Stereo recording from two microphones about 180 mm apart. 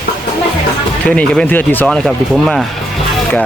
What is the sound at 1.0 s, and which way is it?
Speech, 5° left (ahead or behind).